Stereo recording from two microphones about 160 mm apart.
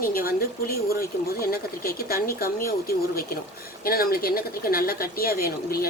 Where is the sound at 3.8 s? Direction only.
65° left (ahead or behind).